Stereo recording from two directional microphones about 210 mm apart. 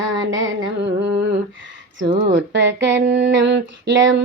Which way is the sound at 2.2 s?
55° right (ahead or behind).